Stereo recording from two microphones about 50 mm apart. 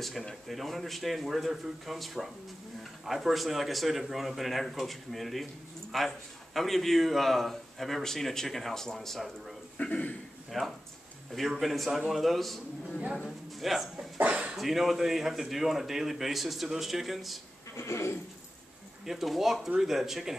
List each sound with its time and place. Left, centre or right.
0.5 s speech: centre
9.8 s a man's voice: left
10.5 s speech: centre
13.6 s speech: centre
14.1 s speech: right
14.6 s speech: centre
17.7 s speech: left
19.0 s speech: centre